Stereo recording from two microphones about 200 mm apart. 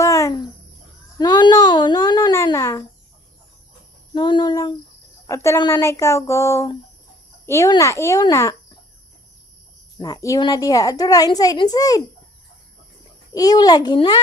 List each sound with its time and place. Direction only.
0.0 s a sound: 15° left (ahead or behind)
4.1 s a woman's voice: 20° left (ahead or behind)
10.0 s a woman's voice: 15° left (ahead or behind)
13.3 s a woman's voice: 20° left (ahead or behind)